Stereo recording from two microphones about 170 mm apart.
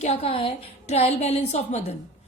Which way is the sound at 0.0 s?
35° left (ahead or behind).